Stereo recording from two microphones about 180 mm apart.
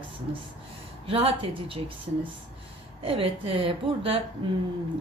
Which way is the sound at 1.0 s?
30° right (ahead or behind).